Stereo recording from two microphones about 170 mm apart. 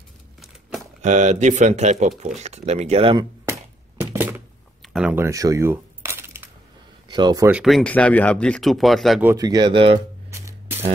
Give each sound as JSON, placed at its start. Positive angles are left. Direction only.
{"t": 1.0, "sound": "speech", "side_deg": -45}
{"t": 4.0, "sound": "thunk", "side_deg": -15}
{"t": 4.8, "sound": "a sound", "side_deg": -5}
{"t": 7.1, "sound": "speech", "side_deg": -25}
{"t": 7.4, "sound": "speech", "side_deg": -5}
{"t": 9.2, "sound": "speech", "side_deg": -20}
{"t": 10.3, "sound": "a sound", "side_deg": -15}